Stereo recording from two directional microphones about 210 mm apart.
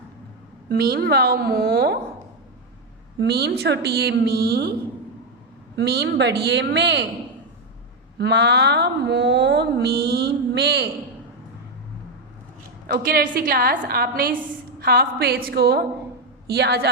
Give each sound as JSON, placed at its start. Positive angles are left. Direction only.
{"t": 0.7, "sound": "speech", "side_deg": -45}
{"t": 3.2, "sound": "speech", "side_deg": -50}
{"t": 5.7, "sound": "a woman's voice", "side_deg": -50}
{"t": 8.2, "sound": "speech", "side_deg": -55}
{"t": 12.9, "sound": "speech", "side_deg": -45}